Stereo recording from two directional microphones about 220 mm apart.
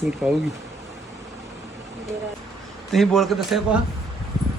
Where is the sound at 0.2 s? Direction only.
10° right (ahead or behind).